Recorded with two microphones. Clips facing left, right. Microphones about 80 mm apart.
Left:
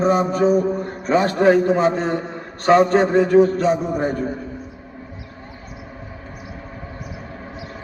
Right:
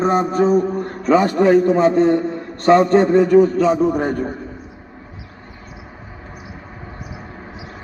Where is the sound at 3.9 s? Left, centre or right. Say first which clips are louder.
Right 1 dB; right.